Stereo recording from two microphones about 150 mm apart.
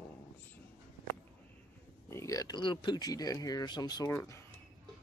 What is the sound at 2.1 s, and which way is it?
Speech, 20° left (ahead or behind).